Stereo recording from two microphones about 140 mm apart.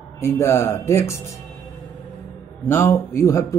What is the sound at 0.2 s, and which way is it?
Speech, 20° left (ahead or behind).